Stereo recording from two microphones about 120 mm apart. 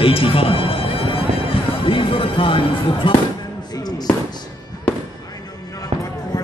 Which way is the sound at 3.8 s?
35° left (ahead or behind).